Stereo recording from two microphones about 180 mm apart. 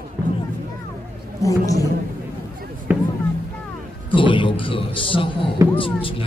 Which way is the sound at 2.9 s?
10° right (ahead or behind).